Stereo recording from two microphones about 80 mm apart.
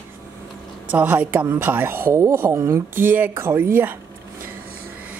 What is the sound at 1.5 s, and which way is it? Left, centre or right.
Speech, right.